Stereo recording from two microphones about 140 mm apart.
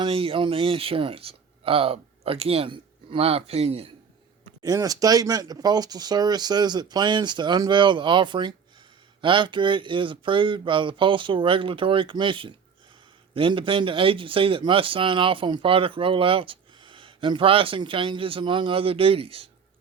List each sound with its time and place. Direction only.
0.0 s speech: 40° right (ahead or behind)
4.6 s speech: 25° right (ahead or behind); by 19.5 s 40° right (ahead or behind)